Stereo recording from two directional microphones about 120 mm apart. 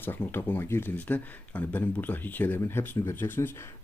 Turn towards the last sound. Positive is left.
turn(degrees=20)  # may be behind; listen again after turning